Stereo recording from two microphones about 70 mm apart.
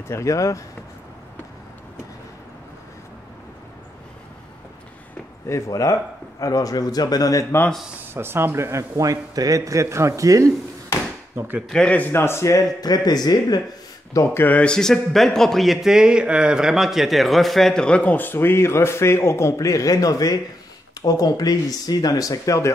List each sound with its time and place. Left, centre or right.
0.1 s speech: left
5.7 s speech: left
8.1 s a man's voice: right
11.7 s a man's voice: centre
12.1 s speech: left
12.8 s speech: left
14.3 s speech: left
14.6 s a man's voice: centre; by 22.7 s left